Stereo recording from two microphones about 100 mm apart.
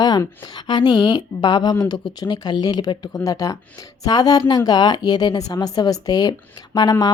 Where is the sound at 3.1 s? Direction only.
35° left (ahead or behind).